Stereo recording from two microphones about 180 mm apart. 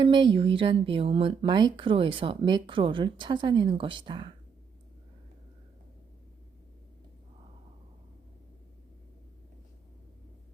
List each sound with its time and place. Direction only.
0.0 s speech: 25° right (ahead or behind)